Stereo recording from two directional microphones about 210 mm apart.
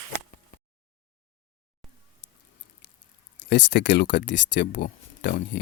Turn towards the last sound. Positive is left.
turn(degrees=50)  # may be behind; listen again after turning